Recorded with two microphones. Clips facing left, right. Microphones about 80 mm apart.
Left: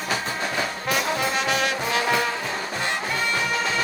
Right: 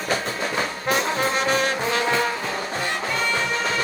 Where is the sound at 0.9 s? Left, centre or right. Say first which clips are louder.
Right 3 dB; right.